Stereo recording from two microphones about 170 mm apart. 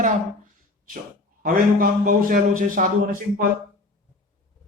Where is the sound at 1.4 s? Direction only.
55° right (ahead or behind).